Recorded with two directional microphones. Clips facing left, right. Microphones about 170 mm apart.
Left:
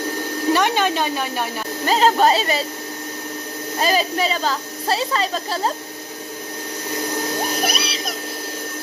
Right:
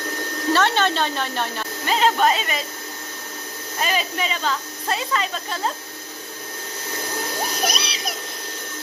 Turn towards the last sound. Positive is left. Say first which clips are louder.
# left 2 dB
turn(degrees=5)  # may be behind; listen again after turning